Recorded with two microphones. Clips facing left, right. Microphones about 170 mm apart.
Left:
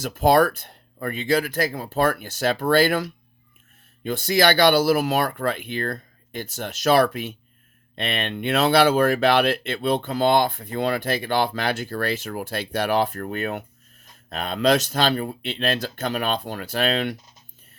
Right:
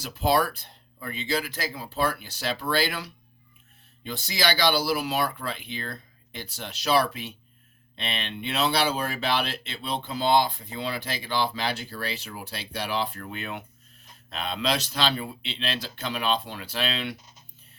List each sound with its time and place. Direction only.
0.0 s speech: 50° left (ahead or behind)